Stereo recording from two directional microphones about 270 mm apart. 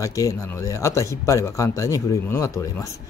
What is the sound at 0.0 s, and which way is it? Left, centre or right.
Speech, centre.